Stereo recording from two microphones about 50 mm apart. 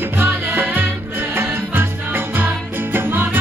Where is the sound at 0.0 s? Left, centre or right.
Right.